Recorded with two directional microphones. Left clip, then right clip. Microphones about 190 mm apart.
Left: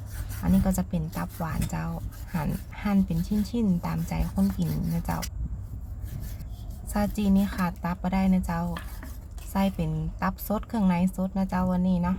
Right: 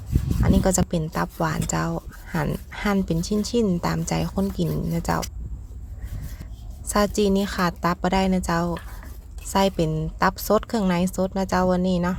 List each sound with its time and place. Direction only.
0.4 s a woman's voice: 35° right (ahead or behind)
6.8 s a woman's voice: 30° right (ahead or behind)